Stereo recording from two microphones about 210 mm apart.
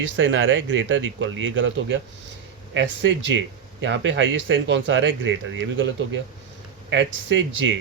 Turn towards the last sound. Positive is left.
turn(degrees=-60)  # may be behind; listen again after turning